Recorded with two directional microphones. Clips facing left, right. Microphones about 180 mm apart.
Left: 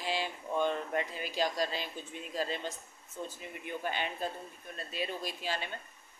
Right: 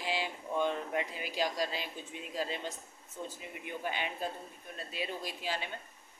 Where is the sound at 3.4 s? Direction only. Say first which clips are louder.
Left 1 dB; 10° right (ahead or behind).